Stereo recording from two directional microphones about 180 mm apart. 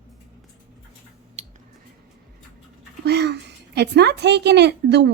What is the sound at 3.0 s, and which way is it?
A woman's voice, 65° right (ahead or behind).